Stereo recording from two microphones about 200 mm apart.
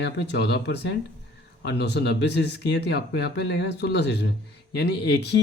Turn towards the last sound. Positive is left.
turn(degrees=60)  # may be behind; listen again after turning